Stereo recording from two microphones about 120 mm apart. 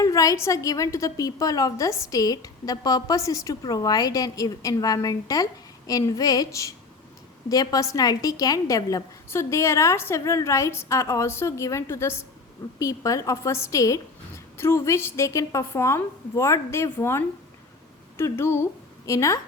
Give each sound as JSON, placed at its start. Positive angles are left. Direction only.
{"t": 0.0, "sound": "a woman's voice", "side_deg": 30}